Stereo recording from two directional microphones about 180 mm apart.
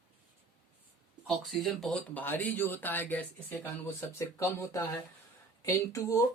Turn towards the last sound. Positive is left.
turn(degrees=15)  # may be behind; listen again after turning